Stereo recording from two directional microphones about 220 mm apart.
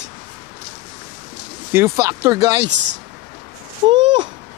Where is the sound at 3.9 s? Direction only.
20° right (ahead or behind).